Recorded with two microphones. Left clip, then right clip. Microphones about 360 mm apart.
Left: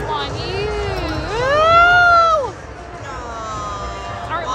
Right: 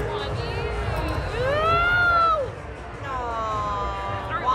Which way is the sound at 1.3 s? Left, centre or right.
Centre.